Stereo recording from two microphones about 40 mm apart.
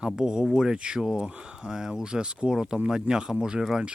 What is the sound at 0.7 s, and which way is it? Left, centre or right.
Speech, right.